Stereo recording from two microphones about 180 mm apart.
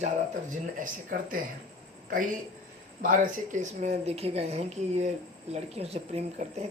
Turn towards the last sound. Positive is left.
turn(degrees=-35)  # may be behind; listen again after turning